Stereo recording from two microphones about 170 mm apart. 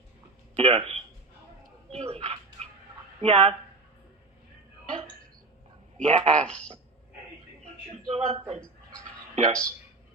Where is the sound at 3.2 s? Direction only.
35° right (ahead or behind).